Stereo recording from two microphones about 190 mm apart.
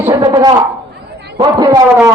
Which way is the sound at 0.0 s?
15° right (ahead or behind).